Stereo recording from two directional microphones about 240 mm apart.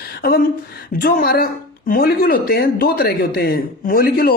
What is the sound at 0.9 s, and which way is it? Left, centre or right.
Speech, left.